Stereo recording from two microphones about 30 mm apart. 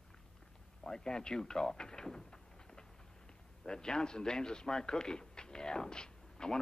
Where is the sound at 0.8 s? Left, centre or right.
Left.